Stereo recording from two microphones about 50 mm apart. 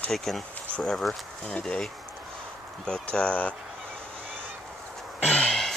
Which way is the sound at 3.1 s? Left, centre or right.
Left.